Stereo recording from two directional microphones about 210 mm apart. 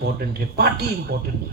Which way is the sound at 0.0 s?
50° right (ahead or behind).